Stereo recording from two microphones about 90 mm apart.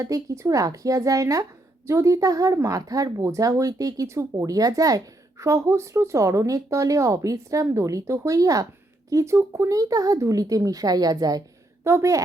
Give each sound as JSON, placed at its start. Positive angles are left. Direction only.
{"t": 0.0, "sound": "speech", "side_deg": -35}
{"t": 11.8, "sound": "a woman's voice", "side_deg": -30}